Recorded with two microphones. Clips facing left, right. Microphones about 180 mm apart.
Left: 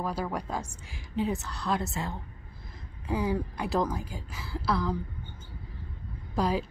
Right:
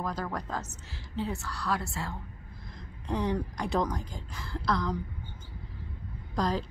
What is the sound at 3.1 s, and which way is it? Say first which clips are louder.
A woman's voice: left 1 dB; 5° left (ahead or behind).